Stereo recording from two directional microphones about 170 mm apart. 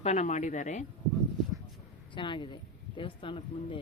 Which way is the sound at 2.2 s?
30° left (ahead or behind).